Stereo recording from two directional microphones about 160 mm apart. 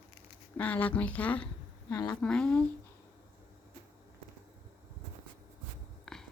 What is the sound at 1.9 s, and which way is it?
Speech, 25° left (ahead or behind).